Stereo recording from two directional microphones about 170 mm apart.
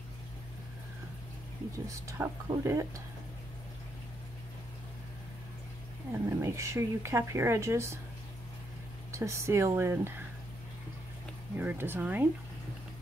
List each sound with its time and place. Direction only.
1.9 s speech: 20° right (ahead or behind)
6.1 s speech: 15° right (ahead or behind)
9.1 s speech: 15° right (ahead or behind)
11.5 s speech: 10° right (ahead or behind)